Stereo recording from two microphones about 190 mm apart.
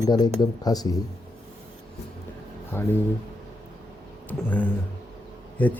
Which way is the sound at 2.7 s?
15° left (ahead or behind).